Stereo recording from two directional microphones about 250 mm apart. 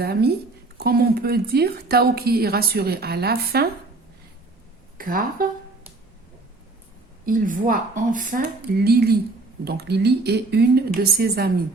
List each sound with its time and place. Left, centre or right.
0.0 s speech: right
4.9 s speech: right
7.3 s speech: right